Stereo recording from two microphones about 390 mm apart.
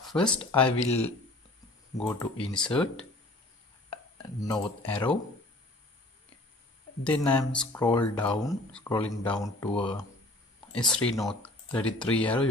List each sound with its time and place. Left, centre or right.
0.0 s speech: centre
0.8 s speech: centre
4.4 s speech: centre
7.0 s speech: centre
11.1 s speech: centre